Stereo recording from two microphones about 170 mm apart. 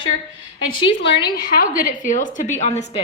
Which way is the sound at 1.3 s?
60° left (ahead or behind).